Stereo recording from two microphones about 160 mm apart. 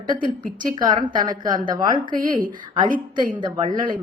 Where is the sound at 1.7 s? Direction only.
30° right (ahead or behind).